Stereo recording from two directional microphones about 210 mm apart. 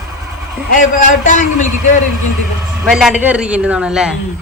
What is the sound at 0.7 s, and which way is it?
Speech, 40° left (ahead or behind).